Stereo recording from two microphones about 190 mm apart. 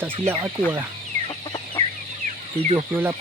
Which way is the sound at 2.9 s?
10° right (ahead or behind).